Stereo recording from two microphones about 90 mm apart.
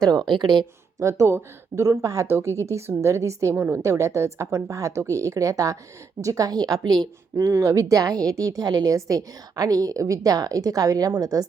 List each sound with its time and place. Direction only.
0.3 s speech: 55° right (ahead or behind)
0.9 s a woman's voice: 35° right (ahead or behind)